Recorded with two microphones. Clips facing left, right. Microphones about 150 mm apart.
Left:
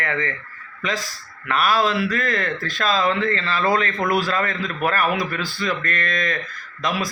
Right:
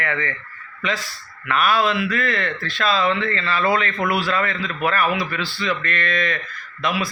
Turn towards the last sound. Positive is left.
turn(degrees=40)  # may be behind; listen again after turning